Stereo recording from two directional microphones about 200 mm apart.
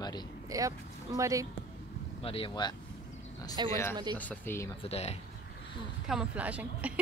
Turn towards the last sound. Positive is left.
turn(degrees=-5)  # may be behind; listen again after turning